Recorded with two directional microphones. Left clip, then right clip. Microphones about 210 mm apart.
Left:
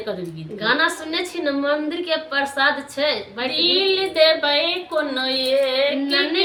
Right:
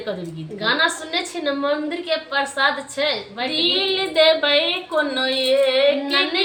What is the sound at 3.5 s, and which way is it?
Speech, 5° right (ahead or behind).